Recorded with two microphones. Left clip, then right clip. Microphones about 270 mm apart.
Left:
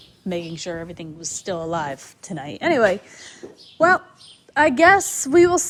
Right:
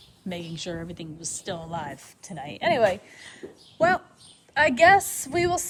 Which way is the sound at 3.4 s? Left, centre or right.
Centre.